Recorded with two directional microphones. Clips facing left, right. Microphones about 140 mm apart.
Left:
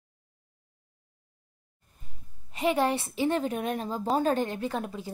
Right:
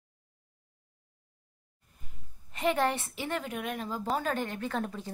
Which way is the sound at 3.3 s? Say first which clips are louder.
Left 6 dB; 30° left (ahead or behind).